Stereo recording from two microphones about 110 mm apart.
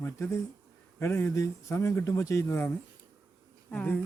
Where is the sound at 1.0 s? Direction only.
20° left (ahead or behind).